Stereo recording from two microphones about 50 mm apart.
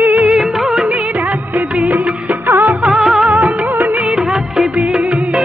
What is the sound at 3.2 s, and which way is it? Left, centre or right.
Music, right.